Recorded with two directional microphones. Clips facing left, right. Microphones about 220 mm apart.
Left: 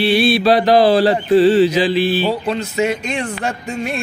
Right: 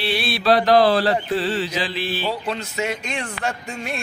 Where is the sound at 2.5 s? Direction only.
20° left (ahead or behind).